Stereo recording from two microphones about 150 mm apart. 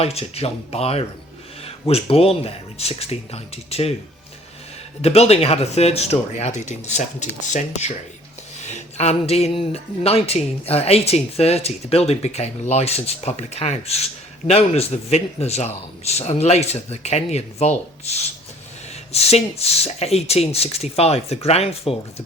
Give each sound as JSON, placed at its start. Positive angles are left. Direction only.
{"t": 0.0, "sound": "speech", "side_deg": 40}
{"t": 5.0, "sound": "speech", "side_deg": 45}